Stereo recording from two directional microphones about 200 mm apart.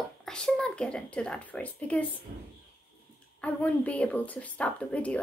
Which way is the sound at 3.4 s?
5° left (ahead or behind).